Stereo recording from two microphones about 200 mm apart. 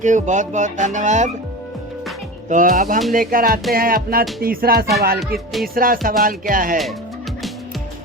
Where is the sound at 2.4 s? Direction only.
40° right (ahead or behind).